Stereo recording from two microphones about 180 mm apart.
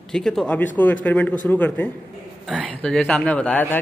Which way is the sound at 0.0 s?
5° left (ahead or behind).